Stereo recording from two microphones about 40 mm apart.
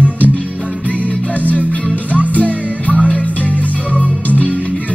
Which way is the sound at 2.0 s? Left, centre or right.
Right.